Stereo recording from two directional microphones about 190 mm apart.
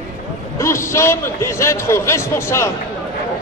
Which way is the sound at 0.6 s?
15° left (ahead or behind).